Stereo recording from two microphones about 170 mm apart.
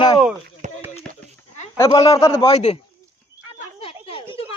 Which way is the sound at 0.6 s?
45° right (ahead or behind).